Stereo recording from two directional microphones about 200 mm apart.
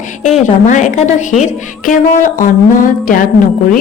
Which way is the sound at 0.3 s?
40° left (ahead or behind).